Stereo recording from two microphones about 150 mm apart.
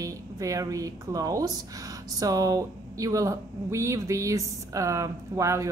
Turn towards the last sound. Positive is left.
turn(degrees=-20)  # may be behind; listen again after turning